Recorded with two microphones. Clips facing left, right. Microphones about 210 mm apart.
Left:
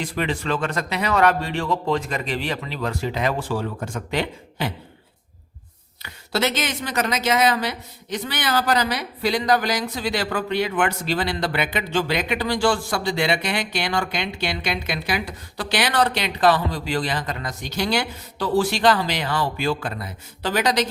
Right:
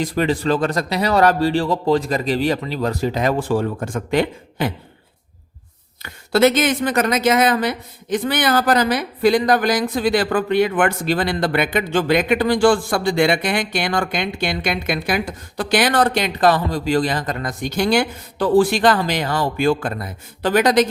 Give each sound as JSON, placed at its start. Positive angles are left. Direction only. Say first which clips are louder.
{"t": 0.0, "sound": "a man's voice", "louder": "right 6 dB", "side_deg": -40}
{"t": 6.0, "sound": "speech", "louder": "right 9 dB", "side_deg": -50}